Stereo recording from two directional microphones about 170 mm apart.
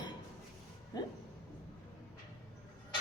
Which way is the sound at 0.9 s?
25° left (ahead or behind).